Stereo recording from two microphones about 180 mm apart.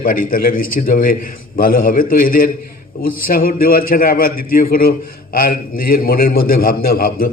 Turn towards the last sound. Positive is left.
turn(degrees=55)  # may be behind; listen again after turning